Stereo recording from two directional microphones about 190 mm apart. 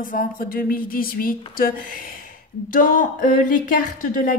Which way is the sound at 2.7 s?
45° left (ahead or behind).